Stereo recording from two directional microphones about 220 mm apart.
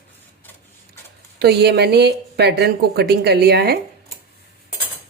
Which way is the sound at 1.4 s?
50° right (ahead or behind).